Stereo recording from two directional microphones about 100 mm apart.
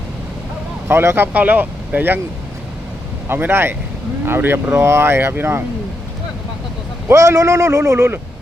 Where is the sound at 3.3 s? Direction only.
20° right (ahead or behind).